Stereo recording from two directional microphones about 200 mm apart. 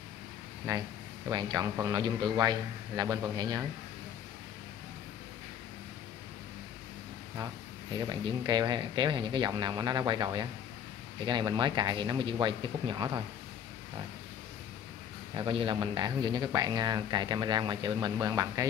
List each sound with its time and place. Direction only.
0.7 s speech: 20° right (ahead or behind)
8.1 s speech: 20° right (ahead or behind)
15.3 s speech: 25° right (ahead or behind)